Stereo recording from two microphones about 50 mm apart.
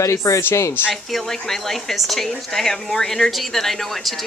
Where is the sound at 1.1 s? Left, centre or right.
Centre.